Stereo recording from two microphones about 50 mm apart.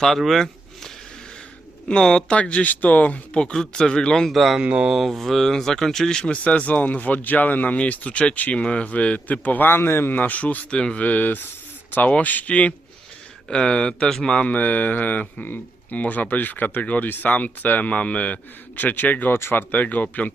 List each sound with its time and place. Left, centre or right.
0.2 s a sound: centre
1.9 s speech: centre
4.3 s speech: centre
4.5 s speech: right
4.9 s speech: centre
6.3 s speech: left
9.6 s speech: left
10.2 s speech: left
10.8 s speech: centre
11.0 s speech: left
13.5 s speech: centre; by 19.3 s left
19.3 s speech: left
19.7 s speech: left